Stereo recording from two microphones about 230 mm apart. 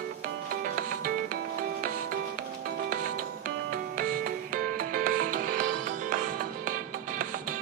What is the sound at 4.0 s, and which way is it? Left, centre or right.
Music, right.